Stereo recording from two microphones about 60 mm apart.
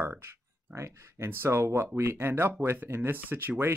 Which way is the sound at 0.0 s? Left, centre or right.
Right.